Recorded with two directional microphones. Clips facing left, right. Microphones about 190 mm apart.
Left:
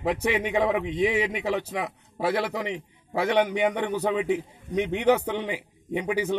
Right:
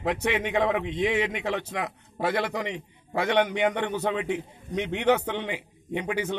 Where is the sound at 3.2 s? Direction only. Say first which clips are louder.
Left 1 dB; 5° left (ahead or behind).